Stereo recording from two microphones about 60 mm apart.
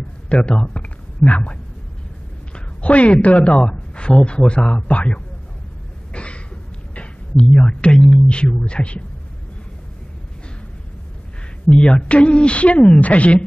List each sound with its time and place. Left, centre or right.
0.3 s a woman's voice: centre
6.1 s a sound: centre
8.0 s speech: centre
11.6 s speech: centre